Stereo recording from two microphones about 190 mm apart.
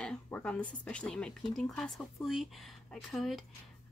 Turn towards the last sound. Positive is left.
turn(degrees=0)  # may be behind; listen again after turning